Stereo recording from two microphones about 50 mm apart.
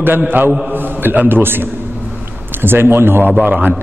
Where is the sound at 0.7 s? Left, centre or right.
Right.